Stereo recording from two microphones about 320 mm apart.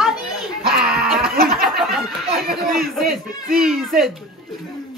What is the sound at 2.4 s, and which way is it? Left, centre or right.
Speech, right.